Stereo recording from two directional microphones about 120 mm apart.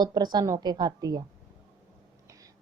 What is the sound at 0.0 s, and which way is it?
A woman's voice, 35° right (ahead or behind).